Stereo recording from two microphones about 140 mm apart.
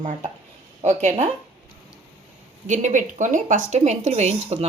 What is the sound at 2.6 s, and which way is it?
A woman's voice, 60° right (ahead or behind).